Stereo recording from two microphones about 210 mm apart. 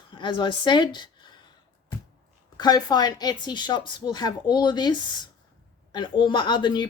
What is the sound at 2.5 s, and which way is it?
A woman's voice, 20° left (ahead or behind).